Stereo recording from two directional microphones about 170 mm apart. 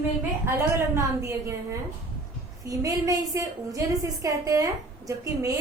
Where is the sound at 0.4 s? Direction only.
15° right (ahead or behind).